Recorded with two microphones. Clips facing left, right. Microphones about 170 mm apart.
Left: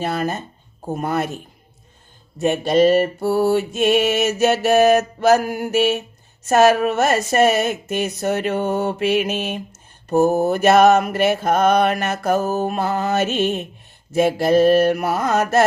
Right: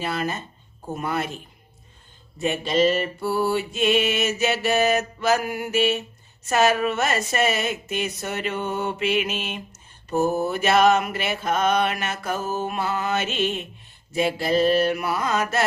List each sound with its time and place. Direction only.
0.0 s mantra: 45° left (ahead or behind)
2.4 s mantra: 50° left (ahead or behind)